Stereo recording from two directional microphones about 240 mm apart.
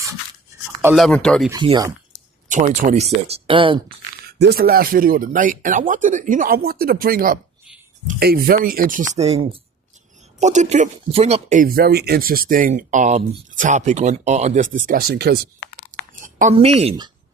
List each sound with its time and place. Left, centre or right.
0.9 s speech: centre
1.5 s speech: centre
2.5 s speech: right
4.3 s speech: right
15.9 s chewing: right